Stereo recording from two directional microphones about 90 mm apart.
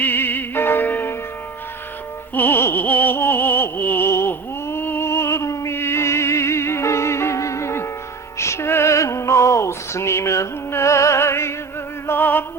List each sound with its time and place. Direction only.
0.0 s music: 20° left (ahead or behind)
2.3 s music: 20° left (ahead or behind)